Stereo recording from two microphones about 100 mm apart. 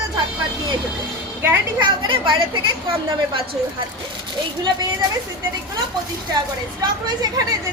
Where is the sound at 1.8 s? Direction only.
55° right (ahead or behind).